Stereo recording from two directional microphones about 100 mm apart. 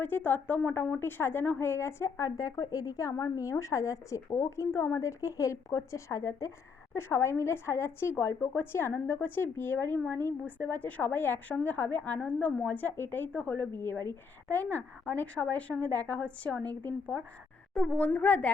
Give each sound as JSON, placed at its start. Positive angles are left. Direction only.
{"t": 0.0, "sound": "a woman's voice", "side_deg": 20}